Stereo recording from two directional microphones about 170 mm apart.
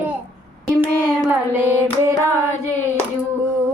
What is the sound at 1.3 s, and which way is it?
Female singing, 10° right (ahead or behind).